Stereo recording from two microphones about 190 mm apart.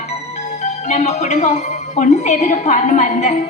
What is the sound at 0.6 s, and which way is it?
A man's voice, 35° left (ahead or behind).